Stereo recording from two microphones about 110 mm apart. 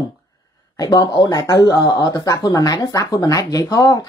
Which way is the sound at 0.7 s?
35° left (ahead or behind).